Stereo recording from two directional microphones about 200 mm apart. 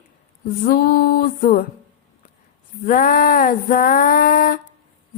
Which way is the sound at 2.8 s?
45° left (ahead or behind).